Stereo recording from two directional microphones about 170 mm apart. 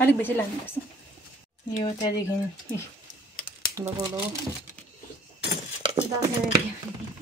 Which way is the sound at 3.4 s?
60° left (ahead or behind).